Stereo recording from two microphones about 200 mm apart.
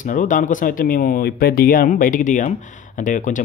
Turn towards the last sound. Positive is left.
turn(degrees=40)  # may be behind; listen again after turning